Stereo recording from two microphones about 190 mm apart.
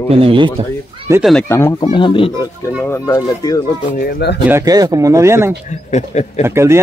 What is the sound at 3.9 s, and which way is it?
Speech, 55° left (ahead or behind).